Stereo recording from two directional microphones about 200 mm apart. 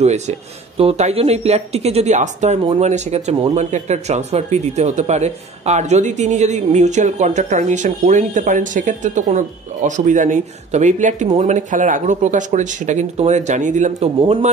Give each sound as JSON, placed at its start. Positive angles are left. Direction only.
{"t": 0.0, "sound": "speech", "side_deg": -35}